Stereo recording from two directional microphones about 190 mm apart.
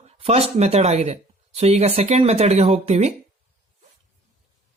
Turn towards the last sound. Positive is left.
turn(degrees=-35)  # may be behind; listen again after turning